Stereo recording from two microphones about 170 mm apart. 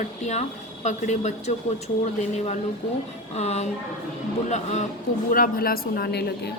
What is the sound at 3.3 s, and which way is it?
Speech, 40° left (ahead or behind).